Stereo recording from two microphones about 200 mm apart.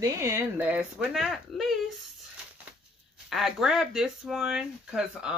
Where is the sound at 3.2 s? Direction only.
Centre (ahead or behind).